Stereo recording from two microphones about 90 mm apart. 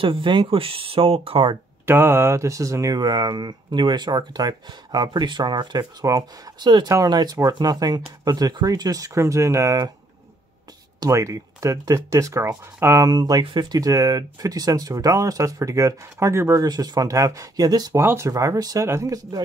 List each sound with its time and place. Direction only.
0.0 s speech: 70° right (ahead or behind); by 1.5 s 90° right
1.9 s speech: 25° right (ahead or behind)
11.0 s speech: 35° right (ahead or behind)
13.1 s speech: 45° right (ahead or behind)
13.4 s speech: 60° right (ahead or behind)
13.7 s speech: 40° right (ahead or behind)
16.6 s speech: 50° right (ahead or behind)
17.9 s speech: 30° right (ahead or behind)
18.3 s speech: 40° right (ahead or behind)